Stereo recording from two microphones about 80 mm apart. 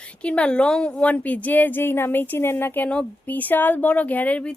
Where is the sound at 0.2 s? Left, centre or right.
Centre.